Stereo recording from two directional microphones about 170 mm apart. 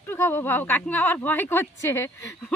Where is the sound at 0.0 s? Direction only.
15° left (ahead or behind).